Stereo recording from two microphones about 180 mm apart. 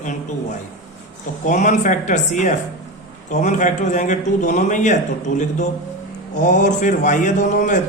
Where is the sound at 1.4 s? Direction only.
45° left (ahead or behind).